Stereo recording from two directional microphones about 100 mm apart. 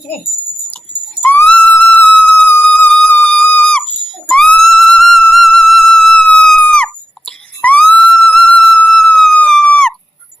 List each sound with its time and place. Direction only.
1.2 s whistle: 20° left (ahead or behind)
1.5 s music: 15° left (ahead or behind)